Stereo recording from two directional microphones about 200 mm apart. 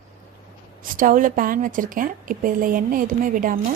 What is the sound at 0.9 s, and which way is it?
A woman's voice, 40° right (ahead or behind).